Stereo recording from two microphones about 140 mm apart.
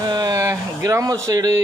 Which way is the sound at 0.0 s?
25° right (ahead or behind).